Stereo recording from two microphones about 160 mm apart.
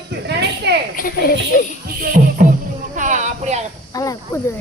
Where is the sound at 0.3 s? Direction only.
90° right.